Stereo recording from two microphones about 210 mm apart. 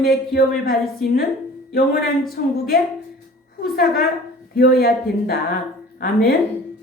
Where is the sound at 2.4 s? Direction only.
45° left (ahead or behind).